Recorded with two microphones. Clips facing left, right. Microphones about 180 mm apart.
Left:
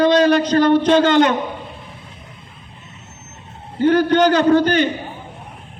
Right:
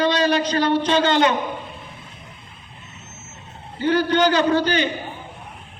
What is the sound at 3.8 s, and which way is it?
A man's voice, 50° left (ahead or behind).